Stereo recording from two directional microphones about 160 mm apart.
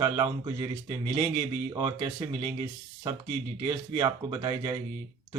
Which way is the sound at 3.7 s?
30° right (ahead or behind).